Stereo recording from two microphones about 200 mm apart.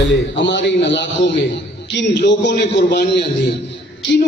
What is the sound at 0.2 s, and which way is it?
A man's voice, 65° left (ahead or behind).